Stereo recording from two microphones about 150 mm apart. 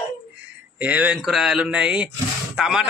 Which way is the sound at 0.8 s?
10° right (ahead or behind).